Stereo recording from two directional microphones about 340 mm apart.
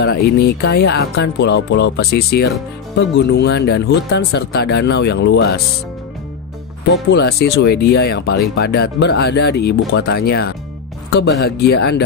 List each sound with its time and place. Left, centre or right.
0.0 s speech: left
6.9 s speech: left